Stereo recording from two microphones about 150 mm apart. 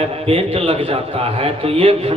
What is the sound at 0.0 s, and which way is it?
A man's voice, 40° right (ahead or behind).